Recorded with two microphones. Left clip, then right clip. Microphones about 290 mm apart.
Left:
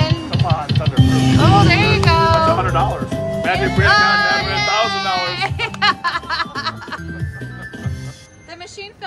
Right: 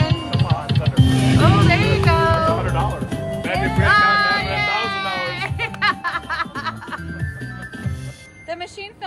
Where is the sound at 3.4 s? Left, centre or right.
Left.